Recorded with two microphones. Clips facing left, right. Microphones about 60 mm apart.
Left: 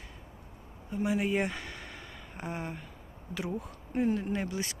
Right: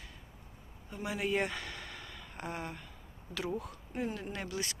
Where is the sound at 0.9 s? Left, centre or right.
Left.